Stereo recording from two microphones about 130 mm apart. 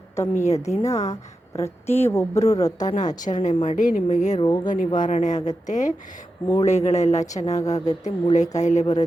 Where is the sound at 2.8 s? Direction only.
70° left (ahead or behind).